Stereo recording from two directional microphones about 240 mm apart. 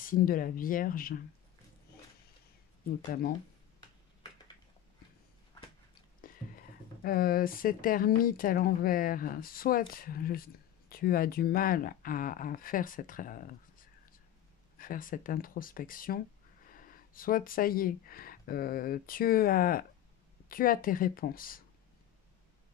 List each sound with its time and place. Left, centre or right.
0.0 s speech: left
6.2 s speech: left
14.8 s speech: left